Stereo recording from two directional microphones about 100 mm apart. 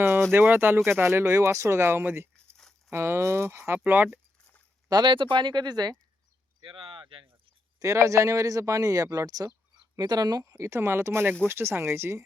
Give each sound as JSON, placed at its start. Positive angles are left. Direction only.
{"t": 0.3, "sound": "speech", "side_deg": -20}
{"t": 4.9, "sound": "speech", "side_deg": -50}
{"t": 6.6, "sound": "a sound", "side_deg": -55}
{"t": 7.8, "sound": "speech", "side_deg": -30}
{"t": 10.5, "sound": "speech", "side_deg": -25}